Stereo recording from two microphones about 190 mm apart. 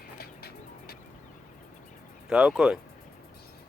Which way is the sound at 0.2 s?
55° left (ahead or behind).